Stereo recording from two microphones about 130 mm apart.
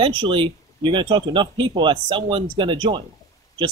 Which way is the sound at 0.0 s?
40° right (ahead or behind).